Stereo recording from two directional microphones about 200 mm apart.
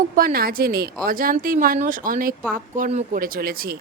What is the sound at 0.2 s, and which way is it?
A woman's voice, 45° right (ahead or behind).